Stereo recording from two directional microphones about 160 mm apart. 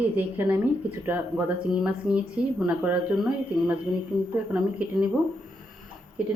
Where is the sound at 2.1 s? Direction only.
Centre (ahead or behind).